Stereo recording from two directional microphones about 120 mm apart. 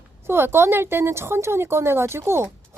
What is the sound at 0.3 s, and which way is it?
Speech, 20° right (ahead or behind).